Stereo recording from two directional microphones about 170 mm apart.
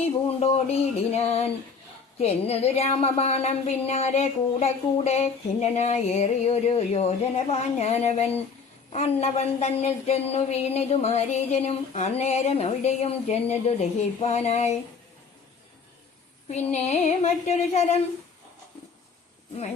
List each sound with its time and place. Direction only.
0.3 s speech: 40° left (ahead or behind)
16.5 s speech: 40° left (ahead or behind)